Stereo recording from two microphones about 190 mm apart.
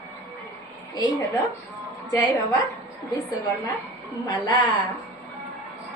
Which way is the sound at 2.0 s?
20° left (ahead or behind).